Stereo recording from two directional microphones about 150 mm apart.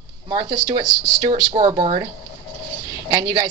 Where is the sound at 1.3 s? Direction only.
40° right (ahead or behind).